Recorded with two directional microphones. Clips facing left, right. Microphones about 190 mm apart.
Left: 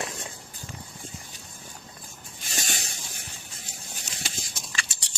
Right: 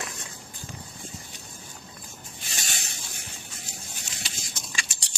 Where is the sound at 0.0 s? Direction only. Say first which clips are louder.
Left 4 dB; 25° left (ahead or behind).